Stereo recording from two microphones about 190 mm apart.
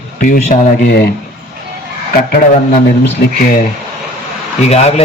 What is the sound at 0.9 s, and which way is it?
Speech, 60° left (ahead or behind).